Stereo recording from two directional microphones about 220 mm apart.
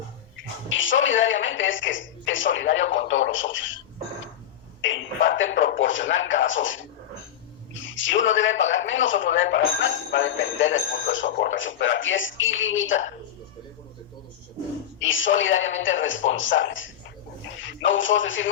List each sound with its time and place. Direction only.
0.7 s speech: 60° left (ahead or behind)
4.8 s speech: 60° left (ahead or behind)
14.9 s speech: 60° left (ahead or behind)